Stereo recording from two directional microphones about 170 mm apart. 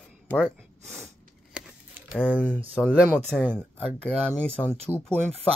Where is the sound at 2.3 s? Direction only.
10° left (ahead or behind).